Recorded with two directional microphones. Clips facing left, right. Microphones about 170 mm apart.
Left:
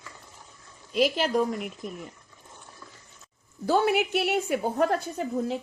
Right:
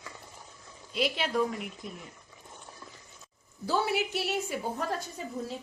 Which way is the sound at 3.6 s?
60° left (ahead or behind).